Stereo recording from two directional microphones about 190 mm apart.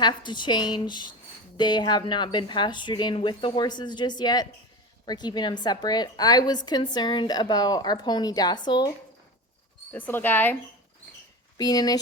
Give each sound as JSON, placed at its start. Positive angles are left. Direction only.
{"t": 0.0, "sound": "a woman's voice", "side_deg": 25}
{"t": 9.9, "sound": "speech", "side_deg": 10}
{"t": 11.5, "sound": "a woman's voice", "side_deg": 20}